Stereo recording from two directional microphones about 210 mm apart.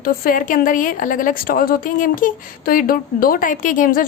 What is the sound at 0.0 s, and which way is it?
A woman's voice, 40° left (ahead or behind).